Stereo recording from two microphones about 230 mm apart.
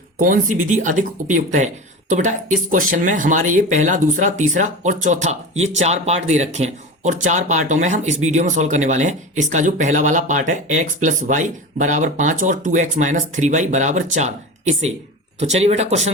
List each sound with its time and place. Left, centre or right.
0.7 s speech: right